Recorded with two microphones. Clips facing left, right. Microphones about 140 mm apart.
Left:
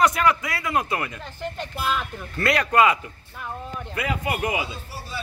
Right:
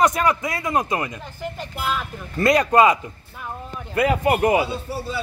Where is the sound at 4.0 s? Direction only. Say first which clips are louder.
Right 8 dB; 45° right (ahead or behind).